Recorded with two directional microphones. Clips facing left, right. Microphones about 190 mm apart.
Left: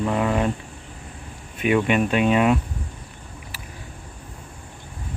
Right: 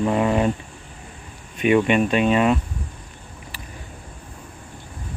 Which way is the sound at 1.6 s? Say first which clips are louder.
Right 2 dB; 5° left (ahead or behind).